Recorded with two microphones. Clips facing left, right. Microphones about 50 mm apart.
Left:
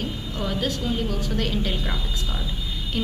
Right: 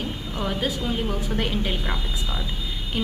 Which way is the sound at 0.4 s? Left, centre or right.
Centre.